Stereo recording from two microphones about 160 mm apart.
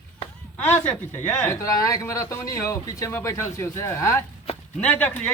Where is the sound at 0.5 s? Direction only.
10° left (ahead or behind).